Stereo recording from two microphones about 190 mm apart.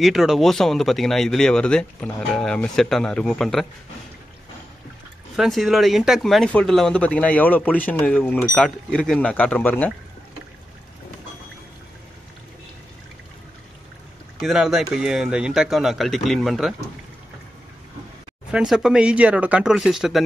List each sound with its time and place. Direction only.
0.0 s speech: centre (ahead or behind)
5.3 s speech: centre (ahead or behind)
14.4 s speech: 5° right (ahead or behind)
18.5 s speech: 5° right (ahead or behind)